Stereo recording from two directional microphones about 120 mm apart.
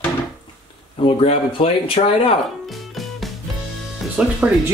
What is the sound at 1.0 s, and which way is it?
Speech, 50° left (ahead or behind).